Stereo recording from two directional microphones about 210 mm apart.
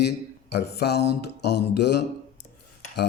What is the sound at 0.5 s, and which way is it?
A man's voice, 50° left (ahead or behind).